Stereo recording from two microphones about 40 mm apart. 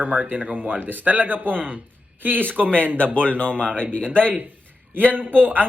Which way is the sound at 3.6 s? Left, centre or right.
Left.